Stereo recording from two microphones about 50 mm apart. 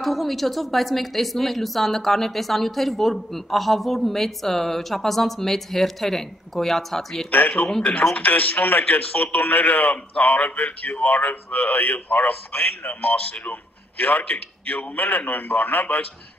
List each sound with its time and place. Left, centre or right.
0.0 s speech: centre
7.2 s a man's voice: left